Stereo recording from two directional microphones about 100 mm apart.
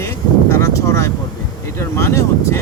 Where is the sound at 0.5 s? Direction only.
30° left (ahead or behind).